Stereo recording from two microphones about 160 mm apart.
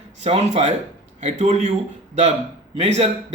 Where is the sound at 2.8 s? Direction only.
40° right (ahead or behind).